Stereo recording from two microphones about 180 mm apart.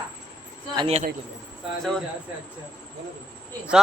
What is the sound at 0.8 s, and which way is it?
Speech, 35° right (ahead or behind).